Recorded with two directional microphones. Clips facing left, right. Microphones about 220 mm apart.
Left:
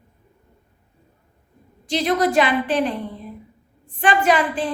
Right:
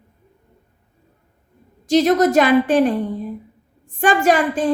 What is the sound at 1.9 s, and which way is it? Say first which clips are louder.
A woman's voice: right 6 dB; 45° right (ahead or behind).